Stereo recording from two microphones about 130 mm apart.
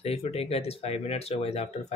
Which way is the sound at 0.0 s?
50° left (ahead or behind).